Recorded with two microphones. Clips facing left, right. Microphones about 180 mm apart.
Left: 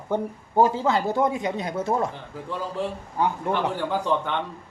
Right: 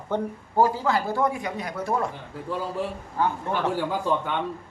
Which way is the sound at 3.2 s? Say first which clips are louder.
Left 1 dB; 20° left (ahead or behind).